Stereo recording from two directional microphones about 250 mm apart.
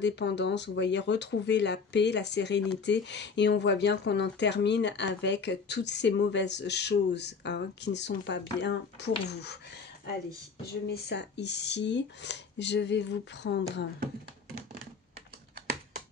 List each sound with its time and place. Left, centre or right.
0.0 s speech: left
10.6 s speech: left